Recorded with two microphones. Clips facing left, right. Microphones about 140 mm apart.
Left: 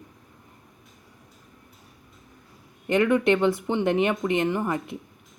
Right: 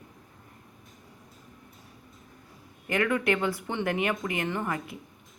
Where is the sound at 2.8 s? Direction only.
20° left (ahead or behind).